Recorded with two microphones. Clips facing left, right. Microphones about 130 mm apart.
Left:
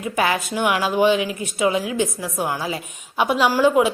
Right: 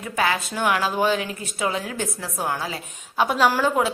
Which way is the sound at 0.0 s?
20° left (ahead or behind).